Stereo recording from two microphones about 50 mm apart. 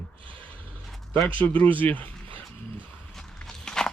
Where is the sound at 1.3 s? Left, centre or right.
Left.